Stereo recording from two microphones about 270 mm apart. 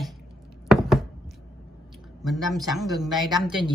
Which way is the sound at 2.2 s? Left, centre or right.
Centre.